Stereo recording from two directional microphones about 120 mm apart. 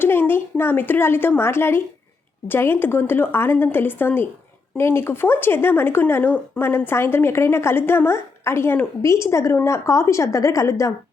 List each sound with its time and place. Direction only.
0.0 s a woman's voice: 15° left (ahead or behind)